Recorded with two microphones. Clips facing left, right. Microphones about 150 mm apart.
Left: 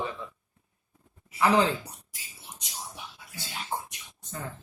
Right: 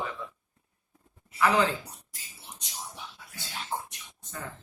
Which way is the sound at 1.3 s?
30° left (ahead or behind).